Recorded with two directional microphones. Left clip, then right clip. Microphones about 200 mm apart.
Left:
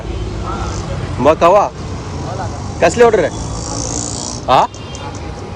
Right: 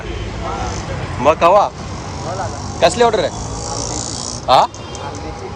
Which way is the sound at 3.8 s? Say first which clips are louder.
Left 1 dB; 30° left (ahead or behind).